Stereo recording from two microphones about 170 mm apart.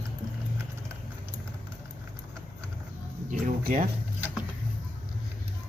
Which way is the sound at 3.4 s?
55° right (ahead or behind).